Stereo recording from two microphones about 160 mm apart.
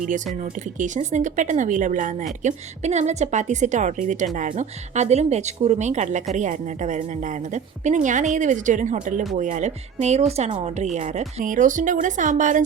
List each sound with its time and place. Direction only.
0.5 s a woman's voice: 50° right (ahead or behind)